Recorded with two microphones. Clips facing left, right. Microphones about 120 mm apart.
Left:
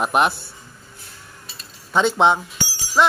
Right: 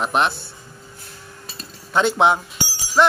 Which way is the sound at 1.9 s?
Centre (ahead or behind).